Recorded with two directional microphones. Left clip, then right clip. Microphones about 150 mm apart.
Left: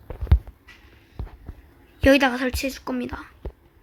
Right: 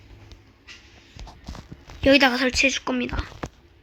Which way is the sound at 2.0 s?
Centre (ahead or behind).